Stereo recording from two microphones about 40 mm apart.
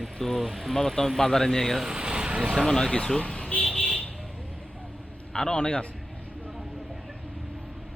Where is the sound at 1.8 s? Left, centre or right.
Right.